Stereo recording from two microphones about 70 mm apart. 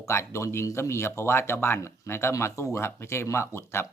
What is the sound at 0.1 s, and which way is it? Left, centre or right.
Speech, left.